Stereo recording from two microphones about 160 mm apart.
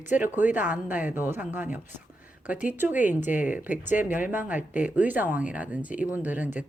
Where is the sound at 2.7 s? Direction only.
10° right (ahead or behind).